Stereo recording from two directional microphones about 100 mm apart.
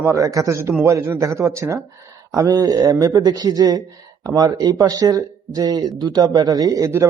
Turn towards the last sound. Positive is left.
turn(degrees=-40)  # may be behind; listen again after turning